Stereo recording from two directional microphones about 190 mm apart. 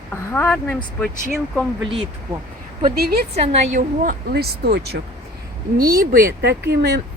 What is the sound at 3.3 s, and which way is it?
A woman's voice, 35° right (ahead or behind).